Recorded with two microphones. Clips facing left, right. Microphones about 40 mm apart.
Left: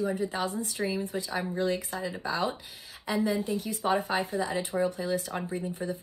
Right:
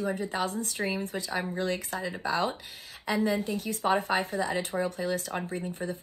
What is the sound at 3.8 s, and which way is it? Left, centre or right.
Speech, right.